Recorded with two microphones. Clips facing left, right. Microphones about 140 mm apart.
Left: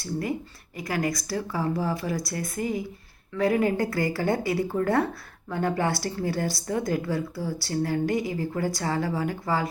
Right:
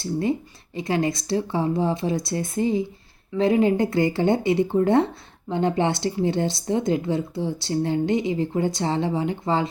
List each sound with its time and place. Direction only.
0.0 s a woman's voice: 25° right (ahead or behind)